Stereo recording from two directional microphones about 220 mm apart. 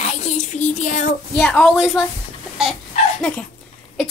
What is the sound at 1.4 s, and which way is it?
Speech, 5° left (ahead or behind).